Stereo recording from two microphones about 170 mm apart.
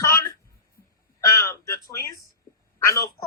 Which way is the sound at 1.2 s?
15° left (ahead or behind).